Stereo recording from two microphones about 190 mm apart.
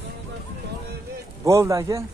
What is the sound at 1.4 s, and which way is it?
Speech, 15° right (ahead or behind).